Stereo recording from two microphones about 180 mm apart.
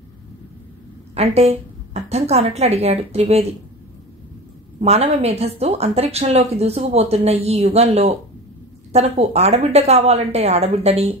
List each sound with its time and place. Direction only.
1.1 s a woman's voice: 35° right (ahead or behind)
4.7 s a woman's voice: 35° right (ahead or behind)